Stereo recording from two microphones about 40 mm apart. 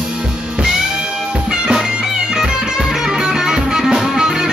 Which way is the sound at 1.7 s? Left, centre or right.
Centre.